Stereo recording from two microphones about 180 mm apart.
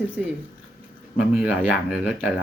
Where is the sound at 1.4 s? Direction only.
5° right (ahead or behind).